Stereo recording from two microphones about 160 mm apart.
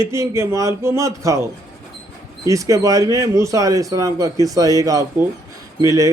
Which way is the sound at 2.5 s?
20° right (ahead or behind).